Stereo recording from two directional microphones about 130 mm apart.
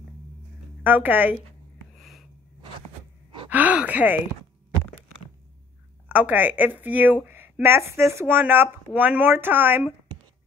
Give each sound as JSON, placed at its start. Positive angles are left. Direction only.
{"t": 0.8, "sound": "speech", "side_deg": -15}
{"t": 2.0, "sound": "a sound", "side_deg": 0}
{"t": 3.4, "sound": "speech", "side_deg": -10}
{"t": 6.0, "sound": "speech", "side_deg": -10}